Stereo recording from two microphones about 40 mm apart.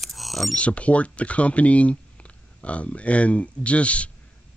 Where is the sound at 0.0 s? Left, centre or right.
Centre.